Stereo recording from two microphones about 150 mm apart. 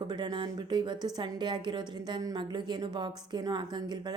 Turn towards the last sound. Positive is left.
turn(degrees=-30)  # may be behind; listen again after turning